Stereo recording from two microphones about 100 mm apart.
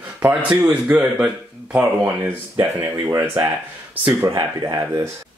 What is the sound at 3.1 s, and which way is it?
Speech, 20° right (ahead or behind).